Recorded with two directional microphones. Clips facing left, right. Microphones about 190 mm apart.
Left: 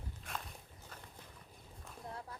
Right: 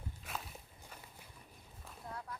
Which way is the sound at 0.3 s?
5° right (ahead or behind).